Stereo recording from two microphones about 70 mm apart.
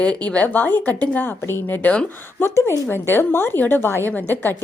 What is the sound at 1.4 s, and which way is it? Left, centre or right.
A woman's voice, left.